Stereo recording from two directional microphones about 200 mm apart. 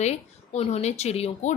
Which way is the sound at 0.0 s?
35° left (ahead or behind).